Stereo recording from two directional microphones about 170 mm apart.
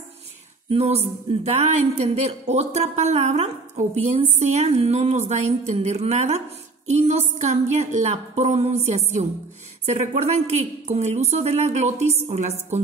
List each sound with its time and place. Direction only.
0.7 s speech: 40° right (ahead or behind)